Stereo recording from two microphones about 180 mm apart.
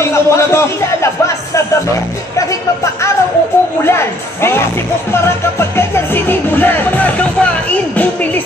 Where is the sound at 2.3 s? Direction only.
15° left (ahead or behind).